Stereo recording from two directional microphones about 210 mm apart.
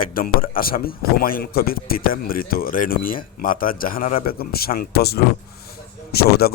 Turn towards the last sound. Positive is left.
turn(degrees=45)  # may be behind; listen again after turning